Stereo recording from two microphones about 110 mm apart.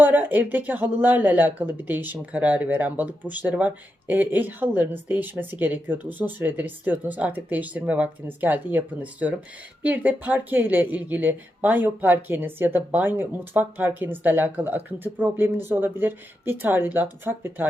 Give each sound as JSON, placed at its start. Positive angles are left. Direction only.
{"t": 0.0, "sound": "speech", "side_deg": -15}